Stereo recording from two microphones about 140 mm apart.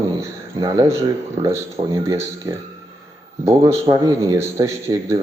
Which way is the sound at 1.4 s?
20° right (ahead or behind).